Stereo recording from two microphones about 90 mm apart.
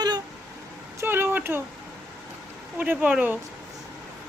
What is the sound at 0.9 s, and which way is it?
Speech, 25° right (ahead or behind).